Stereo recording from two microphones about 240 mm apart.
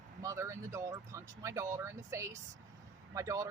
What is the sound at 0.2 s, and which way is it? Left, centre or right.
Speech, centre.